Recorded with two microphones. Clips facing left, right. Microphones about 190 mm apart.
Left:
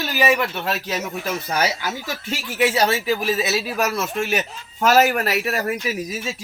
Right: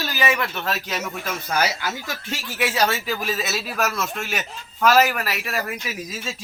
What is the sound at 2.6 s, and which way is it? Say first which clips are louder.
Speech: left 4 dB; 20° left (ahead or behind).